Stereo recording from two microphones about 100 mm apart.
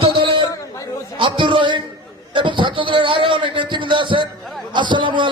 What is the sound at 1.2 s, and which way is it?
A man's voice, 55° right (ahead or behind).